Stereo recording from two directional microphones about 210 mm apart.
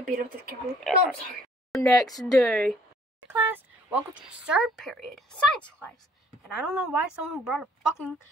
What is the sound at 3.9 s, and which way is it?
A woman's voice, 5° right (ahead or behind).